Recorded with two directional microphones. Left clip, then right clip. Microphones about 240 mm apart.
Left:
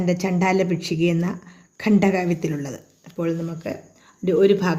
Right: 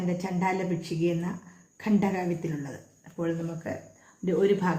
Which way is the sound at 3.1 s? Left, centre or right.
Left.